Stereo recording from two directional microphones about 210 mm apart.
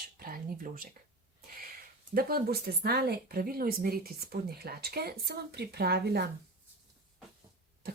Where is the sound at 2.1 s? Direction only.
45° right (ahead or behind).